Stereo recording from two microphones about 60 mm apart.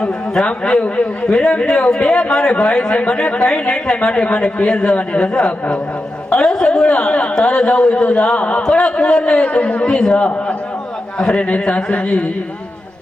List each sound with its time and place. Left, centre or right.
0.4 s a man's voice: centre
8.6 s a man's voice: centre
11.2 s speech: centre